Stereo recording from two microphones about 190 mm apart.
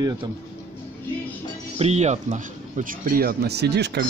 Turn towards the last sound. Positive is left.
turn(degrees=-60)  # may be behind; listen again after turning